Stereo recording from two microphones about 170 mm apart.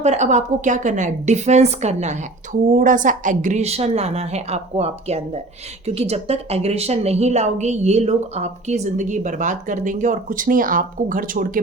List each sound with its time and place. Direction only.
0.0 s a woman's voice: 40° right (ahead or behind)